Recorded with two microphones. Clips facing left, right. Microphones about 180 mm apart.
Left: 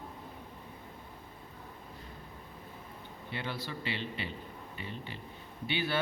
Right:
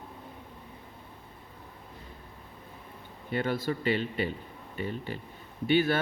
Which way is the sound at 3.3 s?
50° right (ahead or behind).